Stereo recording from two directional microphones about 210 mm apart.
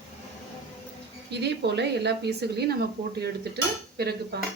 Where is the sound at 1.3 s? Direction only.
55° right (ahead or behind).